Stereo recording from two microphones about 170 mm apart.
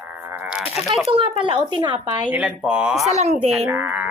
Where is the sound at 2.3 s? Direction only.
10° right (ahead or behind).